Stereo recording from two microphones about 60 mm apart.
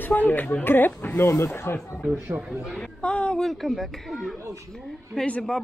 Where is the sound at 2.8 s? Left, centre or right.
Centre.